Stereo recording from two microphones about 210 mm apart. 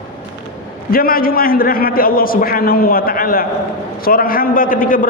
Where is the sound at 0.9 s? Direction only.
45° left (ahead or behind).